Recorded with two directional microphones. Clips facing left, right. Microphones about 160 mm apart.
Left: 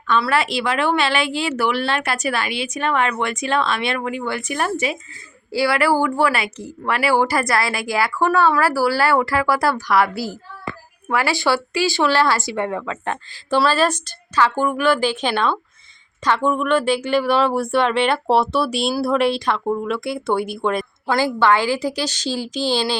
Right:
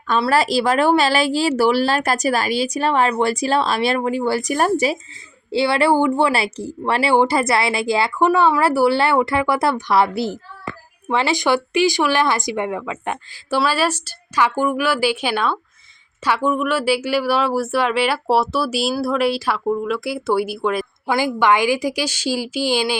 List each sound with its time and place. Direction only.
0.1 s a woman's voice: 35° right (ahead or behind)
5.5 s speech: 25° right (ahead or behind); by 20.8 s 5° right (ahead or behind)
21.1 s speech: 15° right (ahead or behind)